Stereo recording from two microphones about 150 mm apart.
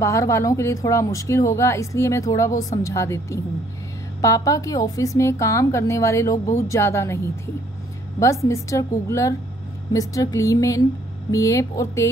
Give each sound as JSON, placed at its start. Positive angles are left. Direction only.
{"t": 0.0, "sound": "a woman's voice", "side_deg": 20}